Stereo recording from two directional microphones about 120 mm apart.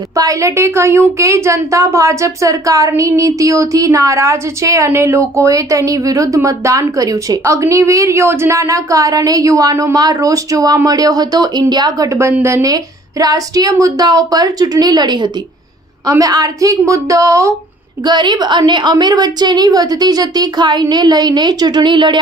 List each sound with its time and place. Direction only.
0.1 s a woman's voice: 30° right (ahead or behind)
18.0 s a woman's voice: 35° right (ahead or behind)